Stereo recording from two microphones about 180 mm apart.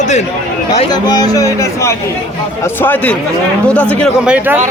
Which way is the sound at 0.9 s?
20° left (ahead or behind).